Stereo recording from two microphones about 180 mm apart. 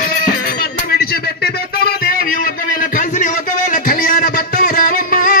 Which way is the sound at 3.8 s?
50° left (ahead or behind).